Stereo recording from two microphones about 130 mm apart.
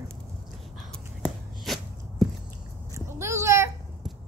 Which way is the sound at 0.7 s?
Centre (ahead or behind).